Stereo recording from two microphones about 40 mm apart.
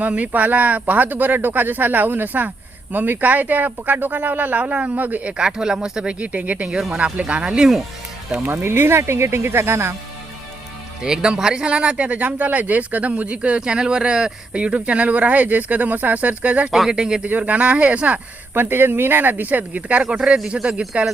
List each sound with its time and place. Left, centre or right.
0.2 s speech: right
5.4 s speech: centre
6.1 s speech: right
8.6 s speech: right
11.0 s speech: centre
13.6 s speech: centre
14.5 s speech: right
16.9 s speech: centre
17.2 s speech: right
18.5 s speech: right
19.9 s speech: right